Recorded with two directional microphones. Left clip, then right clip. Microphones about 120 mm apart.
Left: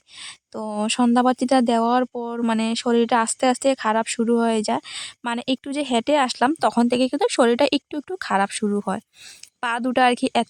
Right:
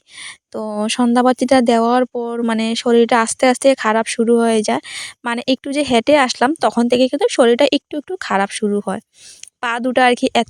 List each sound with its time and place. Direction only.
0.2 s speech: 30° right (ahead or behind)
6.5 s speech: 25° right (ahead or behind)